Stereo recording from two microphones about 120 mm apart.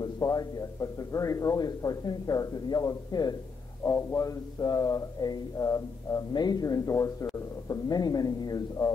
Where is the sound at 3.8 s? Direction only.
25° left (ahead or behind).